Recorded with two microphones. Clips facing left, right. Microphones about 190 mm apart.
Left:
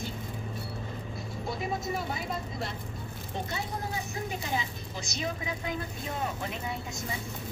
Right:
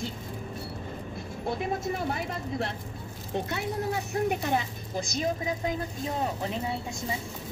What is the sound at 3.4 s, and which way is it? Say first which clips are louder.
Speech: right 6 dB; 65° right (ahead or behind).